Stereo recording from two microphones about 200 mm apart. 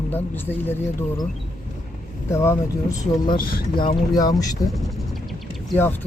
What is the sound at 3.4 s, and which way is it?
Speech, 45° left (ahead or behind).